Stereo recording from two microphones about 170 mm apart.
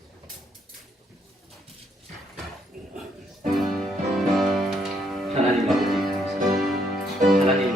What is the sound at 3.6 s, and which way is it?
Music, centre (ahead or behind).